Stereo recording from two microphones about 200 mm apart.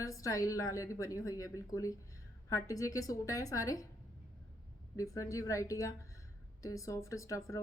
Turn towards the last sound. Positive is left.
turn(degrees=15)  # may be behind; listen again after turning